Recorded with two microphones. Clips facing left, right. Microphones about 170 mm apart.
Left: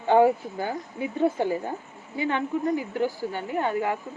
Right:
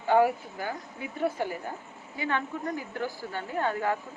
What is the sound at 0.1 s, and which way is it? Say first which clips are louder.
A woman's voice: left 4 dB; 25° left (ahead or behind).